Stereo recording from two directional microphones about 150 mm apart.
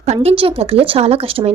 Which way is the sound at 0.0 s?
45° right (ahead or behind).